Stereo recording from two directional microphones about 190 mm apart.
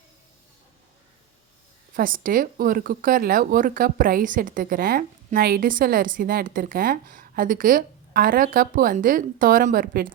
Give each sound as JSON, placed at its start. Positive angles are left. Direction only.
{"t": 2.0, "sound": "speech", "side_deg": -45}